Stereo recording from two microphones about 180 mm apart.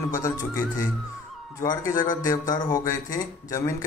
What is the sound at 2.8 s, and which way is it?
Speech, 20° left (ahead or behind).